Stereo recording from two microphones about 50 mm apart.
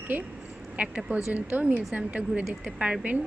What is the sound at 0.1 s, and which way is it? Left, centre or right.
A woman's voice, right.